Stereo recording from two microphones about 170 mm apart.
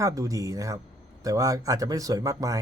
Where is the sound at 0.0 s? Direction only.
20° right (ahead or behind).